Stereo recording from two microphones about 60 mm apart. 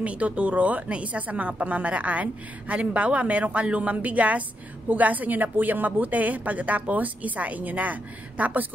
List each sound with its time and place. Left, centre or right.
0.0 s a woman's voice: right